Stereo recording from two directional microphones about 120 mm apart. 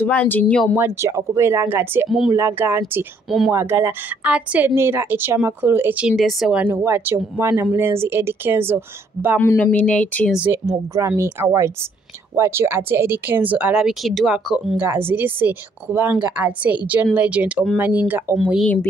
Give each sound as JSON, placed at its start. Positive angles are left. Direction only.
{"t": 0.0, "sound": "speech", "side_deg": 15}
{"t": 0.7, "sound": "speech", "side_deg": -20}
{"t": 2.0, "sound": "a woman's voice", "side_deg": 0}
{"t": 2.3, "sound": "speech", "side_deg": -20}
{"t": 3.3, "sound": "a woman's voice", "side_deg": 0}
{"t": 3.5, "sound": "speech", "side_deg": -20}
{"t": 6.0, "sound": "a woman's voice", "side_deg": 0}
{"t": 6.6, "sound": "speech", "side_deg": -20}
{"t": 9.4, "sound": "speech", "side_deg": 15}
{"t": 11.0, "sound": "a woman's voice", "side_deg": -25}
{"t": 14.8, "sound": "a woman's voice", "side_deg": -20}